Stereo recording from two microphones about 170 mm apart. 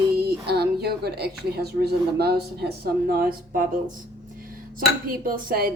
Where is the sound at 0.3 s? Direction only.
70° right (ahead or behind).